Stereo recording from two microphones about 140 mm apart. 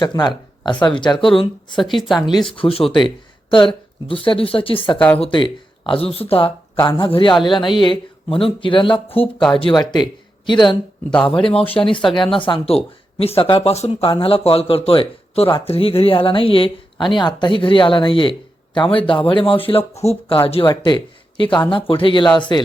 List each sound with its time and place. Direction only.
0.0 s speech: 30° left (ahead or behind)
2.0 s speech: centre (ahead or behind)
2.5 s speech: 40° left (ahead or behind)